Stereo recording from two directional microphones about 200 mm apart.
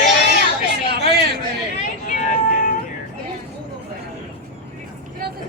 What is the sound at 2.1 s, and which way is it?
Music, 40° left (ahead or behind).